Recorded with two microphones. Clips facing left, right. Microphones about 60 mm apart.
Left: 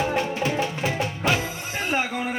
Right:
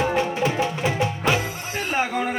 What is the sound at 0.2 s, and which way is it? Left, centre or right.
Music, right.